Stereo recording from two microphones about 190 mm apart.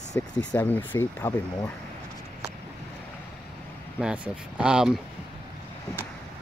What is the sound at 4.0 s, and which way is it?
Speech, 5° right (ahead or behind).